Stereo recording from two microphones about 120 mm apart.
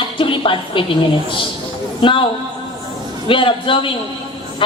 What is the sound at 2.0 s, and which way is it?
Speech, 45° left (ahead or behind).